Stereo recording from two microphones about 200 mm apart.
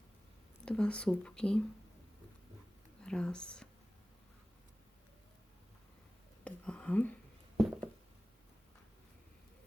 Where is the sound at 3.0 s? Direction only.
5° left (ahead or behind).